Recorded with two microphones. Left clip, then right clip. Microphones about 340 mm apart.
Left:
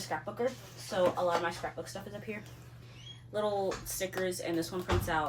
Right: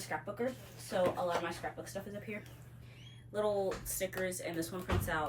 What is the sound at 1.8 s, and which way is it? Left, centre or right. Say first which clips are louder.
Speech: left 2 dB; centre.